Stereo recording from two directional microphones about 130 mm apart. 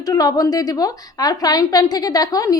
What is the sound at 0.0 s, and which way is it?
A woman's voice, 30° left (ahead or behind).